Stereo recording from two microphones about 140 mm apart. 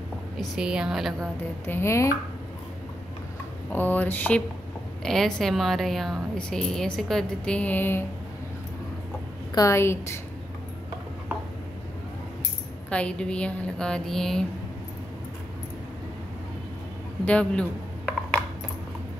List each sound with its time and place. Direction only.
0.4 s a woman's voice: 5° right (ahead or behind)
1.7 s a woman's voice: 20° left (ahead or behind)
3.7 s a woman's voice: 10° left (ahead or behind)
9.5 s a woman's voice: 25° left (ahead or behind)
12.9 s a woman's voice: 10° left (ahead or behind)
17.2 s dishes: 10° left (ahead or behind)